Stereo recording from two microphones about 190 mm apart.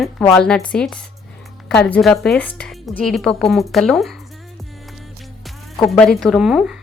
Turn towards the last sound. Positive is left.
turn(degrees=-5)  # may be behind; listen again after turning